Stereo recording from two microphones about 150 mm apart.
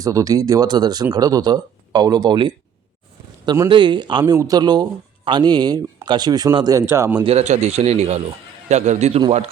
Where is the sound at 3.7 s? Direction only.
30° right (ahead or behind).